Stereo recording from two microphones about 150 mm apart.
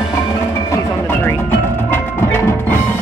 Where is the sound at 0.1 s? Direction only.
20° left (ahead or behind).